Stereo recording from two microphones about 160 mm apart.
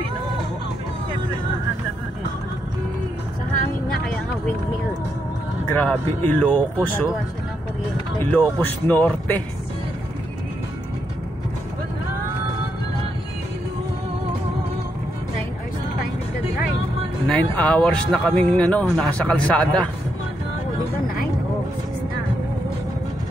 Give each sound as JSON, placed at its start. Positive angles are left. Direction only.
{"t": 5.7, "sound": "speech", "side_deg": 10}
{"t": 8.3, "sound": "speech", "side_deg": 15}
{"t": 17.3, "sound": "speech", "side_deg": 10}